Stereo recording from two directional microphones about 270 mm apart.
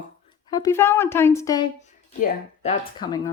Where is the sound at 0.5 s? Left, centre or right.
Centre.